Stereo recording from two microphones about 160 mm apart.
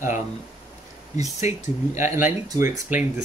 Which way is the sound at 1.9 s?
15° right (ahead or behind).